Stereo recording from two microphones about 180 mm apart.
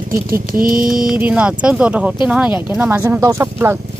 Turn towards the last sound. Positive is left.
turn(degrees=-15)  # may be behind; listen again after turning